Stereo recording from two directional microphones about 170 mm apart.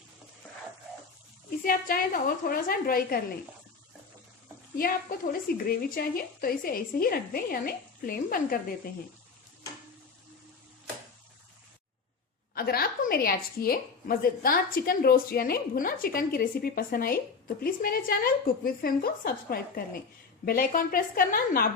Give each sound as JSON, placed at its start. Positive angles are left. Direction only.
{"t": 1.6, "sound": "a woman's voice", "side_deg": 55}
{"t": 4.8, "sound": "a woman's voice", "side_deg": 60}
{"t": 12.5, "sound": "a woman's voice", "side_deg": 60}